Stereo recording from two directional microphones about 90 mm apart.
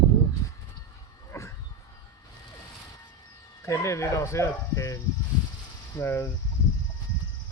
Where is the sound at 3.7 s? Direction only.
35° left (ahead or behind).